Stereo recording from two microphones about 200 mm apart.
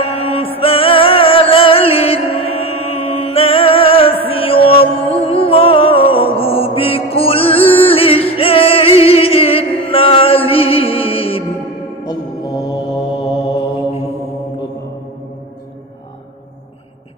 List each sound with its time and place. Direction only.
0.0 s music: 30° left (ahead or behind)
2.3 s mantra: 90° left
2.6 s music: 30° left (ahead or behind)